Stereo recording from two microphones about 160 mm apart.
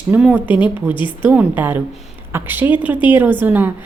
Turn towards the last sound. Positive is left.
turn(degrees=-10)  # may be behind; listen again after turning